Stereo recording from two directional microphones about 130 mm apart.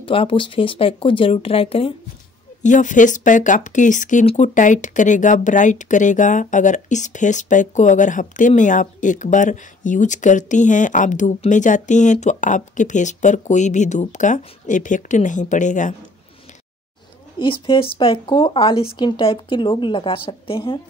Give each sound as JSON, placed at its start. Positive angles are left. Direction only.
{"t": 0.0, "sound": "speech", "side_deg": 40}
{"t": 2.6, "sound": "speech", "side_deg": 75}
{"t": 17.4, "sound": "speech", "side_deg": 40}